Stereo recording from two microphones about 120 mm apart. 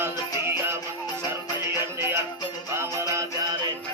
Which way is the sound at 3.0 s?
25° right (ahead or behind).